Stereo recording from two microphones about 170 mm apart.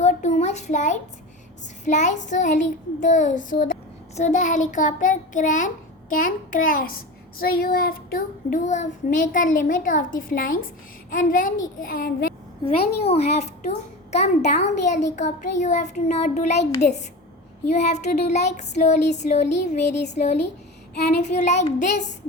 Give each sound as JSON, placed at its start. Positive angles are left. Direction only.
{"t": 0.0, "sound": "a sound", "side_deg": 45}
{"t": 1.8, "sound": "child singing", "side_deg": 45}
{"t": 11.1, "sound": "a child's voice", "side_deg": 55}
{"t": 12.6, "sound": "a child's voice", "side_deg": 35}
{"t": 14.4, "sound": "child singing", "side_deg": 45}
{"t": 17.7, "sound": "a child's voice", "side_deg": 40}
{"t": 19.5, "sound": "child singing", "side_deg": 40}
{"t": 20.1, "sound": "a child's voice", "side_deg": 40}
{"t": 21.2, "sound": "child singing", "side_deg": 45}